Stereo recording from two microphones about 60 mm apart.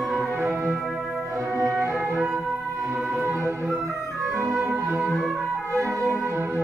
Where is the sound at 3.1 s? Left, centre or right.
Right.